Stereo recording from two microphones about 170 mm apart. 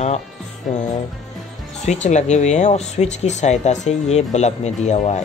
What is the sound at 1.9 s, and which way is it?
Speech, 45° left (ahead or behind).